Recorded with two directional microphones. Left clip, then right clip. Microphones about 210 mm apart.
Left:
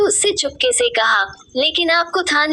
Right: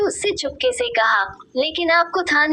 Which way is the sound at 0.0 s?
25° left (ahead or behind).